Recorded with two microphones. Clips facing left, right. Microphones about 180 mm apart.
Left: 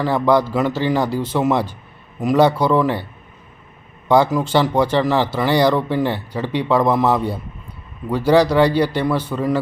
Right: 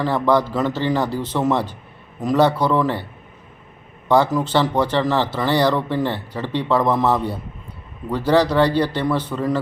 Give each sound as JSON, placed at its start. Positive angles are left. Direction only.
{"t": 0.0, "sound": "speech", "side_deg": 10}
{"t": 4.1, "sound": "speech", "side_deg": 10}